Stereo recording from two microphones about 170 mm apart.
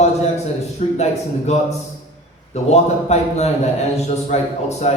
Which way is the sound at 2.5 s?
40° left (ahead or behind).